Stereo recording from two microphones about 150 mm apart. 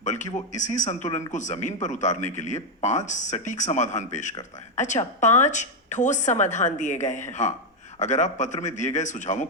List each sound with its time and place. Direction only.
0.0 s a woman's voice: 55° left (ahead or behind)